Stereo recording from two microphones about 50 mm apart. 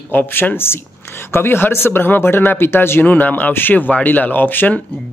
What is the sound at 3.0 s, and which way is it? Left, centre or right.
Speech, left.